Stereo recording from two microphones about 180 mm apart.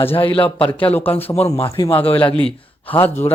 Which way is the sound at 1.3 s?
35° left (ahead or behind).